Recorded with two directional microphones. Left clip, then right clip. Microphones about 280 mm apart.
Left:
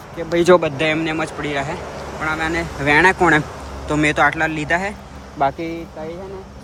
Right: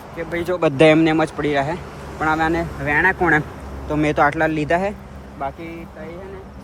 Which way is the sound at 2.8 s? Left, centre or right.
Centre.